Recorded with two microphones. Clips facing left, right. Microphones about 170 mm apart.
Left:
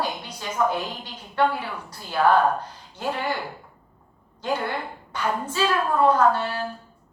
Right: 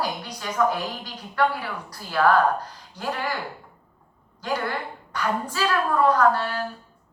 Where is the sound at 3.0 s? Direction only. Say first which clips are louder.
Left 1 dB; 25° left (ahead or behind).